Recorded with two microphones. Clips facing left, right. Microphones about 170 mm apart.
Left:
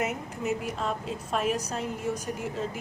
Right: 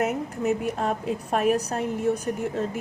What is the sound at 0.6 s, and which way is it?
A woman's voice, 55° right (ahead or behind).